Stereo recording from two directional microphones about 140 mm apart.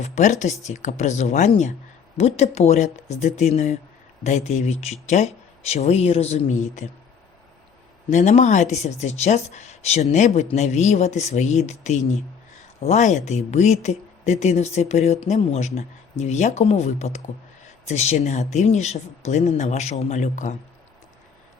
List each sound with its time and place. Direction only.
0.0 s speech: 55° left (ahead or behind)
8.1 s speech: 55° left (ahead or behind)